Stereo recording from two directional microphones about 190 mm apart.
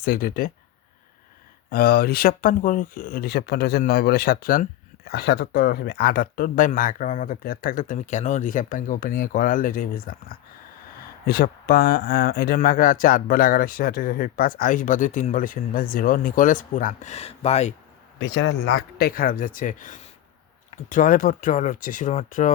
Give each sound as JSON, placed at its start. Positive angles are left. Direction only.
{"t": 0.0, "sound": "speech", "side_deg": 50}
{"t": 1.7, "sound": "speech", "side_deg": 50}
{"t": 18.2, "sound": "speech", "side_deg": 90}
{"t": 18.9, "sound": "speech", "side_deg": 50}